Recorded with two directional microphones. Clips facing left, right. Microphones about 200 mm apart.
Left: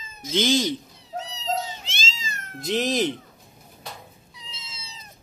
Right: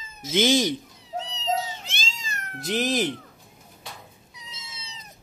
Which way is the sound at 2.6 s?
5° right (ahead or behind).